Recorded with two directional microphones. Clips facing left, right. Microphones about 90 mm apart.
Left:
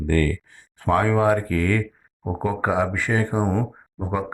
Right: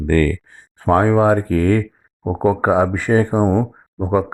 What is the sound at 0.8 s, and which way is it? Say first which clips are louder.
Speech: right 5 dB; 30° right (ahead or behind).